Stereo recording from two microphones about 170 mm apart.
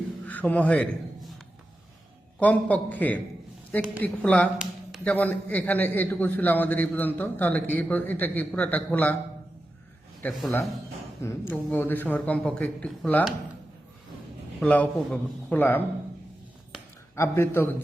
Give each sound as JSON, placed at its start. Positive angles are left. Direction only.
{"t": 0.3, "sound": "a man's voice", "side_deg": 10}
{"t": 2.4, "sound": "a man's voice", "side_deg": 10}
{"t": 10.2, "sound": "a man's voice", "side_deg": 10}
{"t": 14.6, "sound": "a man's voice", "side_deg": 10}
{"t": 17.2, "sound": "a man's voice", "side_deg": 15}